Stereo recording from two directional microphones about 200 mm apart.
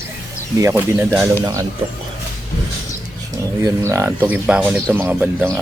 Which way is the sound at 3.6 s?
15° right (ahead or behind).